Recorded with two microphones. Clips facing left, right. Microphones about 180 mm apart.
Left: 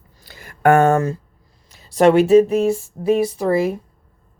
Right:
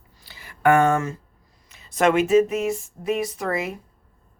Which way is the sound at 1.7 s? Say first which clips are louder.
Left 6 dB; 35° left (ahead or behind).